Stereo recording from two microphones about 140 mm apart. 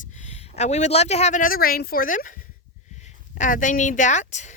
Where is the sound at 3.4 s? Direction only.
65° left (ahead or behind).